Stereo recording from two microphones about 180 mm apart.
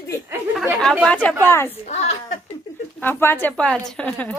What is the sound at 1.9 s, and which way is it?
Speech, 40° left (ahead or behind).